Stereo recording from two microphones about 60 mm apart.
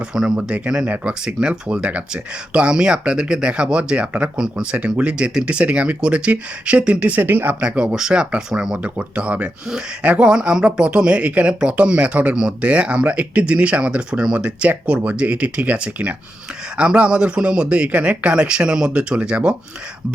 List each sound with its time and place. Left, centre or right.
0.1 s speech: centre; by 7.5 s right
7.6 s speech: centre